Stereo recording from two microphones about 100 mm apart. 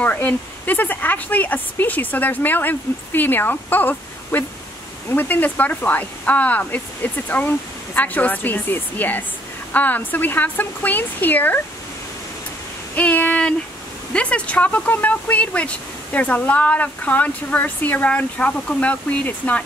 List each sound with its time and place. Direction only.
0.0 s speech: 15° left (ahead or behind)
12.9 s a sound: 15° left (ahead or behind)
14.1 s speech: 10° left (ahead or behind)